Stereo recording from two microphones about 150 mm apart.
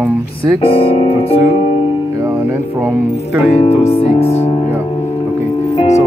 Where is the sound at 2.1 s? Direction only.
15° right (ahead or behind).